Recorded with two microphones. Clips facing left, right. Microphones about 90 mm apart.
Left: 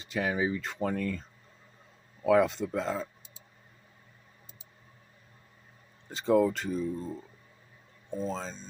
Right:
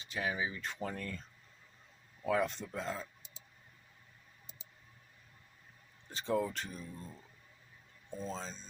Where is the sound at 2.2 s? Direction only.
90° left.